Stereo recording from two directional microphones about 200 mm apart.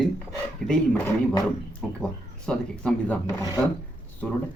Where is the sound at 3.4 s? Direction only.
20° left (ahead or behind).